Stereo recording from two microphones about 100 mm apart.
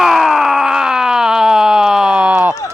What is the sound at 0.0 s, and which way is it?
Groan, centre (ahead or behind).